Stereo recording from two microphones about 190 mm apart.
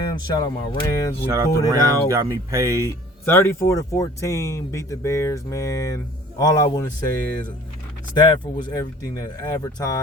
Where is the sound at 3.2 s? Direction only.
10° left (ahead or behind).